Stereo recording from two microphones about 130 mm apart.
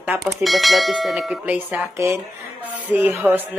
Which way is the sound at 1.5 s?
15° right (ahead or behind).